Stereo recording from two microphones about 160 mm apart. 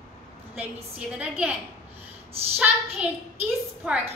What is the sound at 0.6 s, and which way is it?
A woman's voice, 10° right (ahead or behind).